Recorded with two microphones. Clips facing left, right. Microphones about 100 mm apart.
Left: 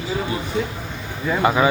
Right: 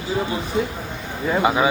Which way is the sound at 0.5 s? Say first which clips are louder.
Right 2 dB; 25° right (ahead or behind).